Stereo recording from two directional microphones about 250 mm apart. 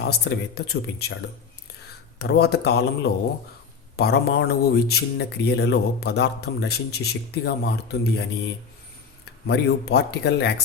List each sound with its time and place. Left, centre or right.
0.0 s speech: left
2.1 s speech: left
9.5 s speech: left